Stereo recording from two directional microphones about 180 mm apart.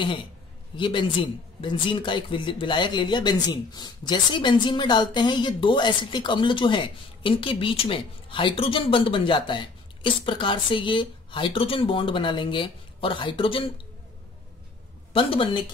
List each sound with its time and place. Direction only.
0.7 s a woman's voice: 25° left (ahead or behind)
15.1 s a woman's voice: 30° left (ahead or behind)